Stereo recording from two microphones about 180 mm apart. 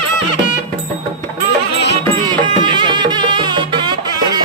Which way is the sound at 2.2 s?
25° right (ahead or behind).